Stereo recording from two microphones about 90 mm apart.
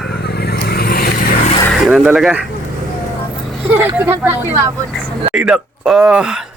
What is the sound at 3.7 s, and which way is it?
Speech, 25° right (ahead or behind).